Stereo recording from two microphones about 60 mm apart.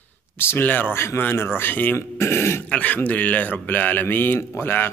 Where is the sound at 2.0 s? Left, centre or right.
Left.